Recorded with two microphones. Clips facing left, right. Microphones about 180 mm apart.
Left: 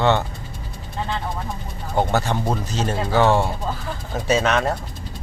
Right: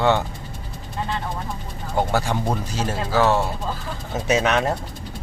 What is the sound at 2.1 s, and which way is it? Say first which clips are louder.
Speech: left 1 dB; 10° right (ahead or behind).